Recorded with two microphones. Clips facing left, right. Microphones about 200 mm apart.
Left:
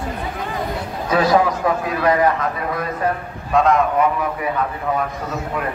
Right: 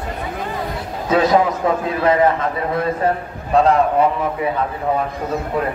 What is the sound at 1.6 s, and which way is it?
A man's voice, 20° right (ahead or behind).